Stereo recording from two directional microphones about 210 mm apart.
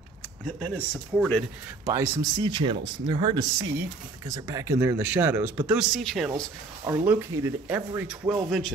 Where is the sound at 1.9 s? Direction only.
15° right (ahead or behind); by 6.4 s centre (ahead or behind).